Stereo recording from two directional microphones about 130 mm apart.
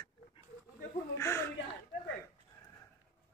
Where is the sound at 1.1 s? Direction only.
20° left (ahead or behind).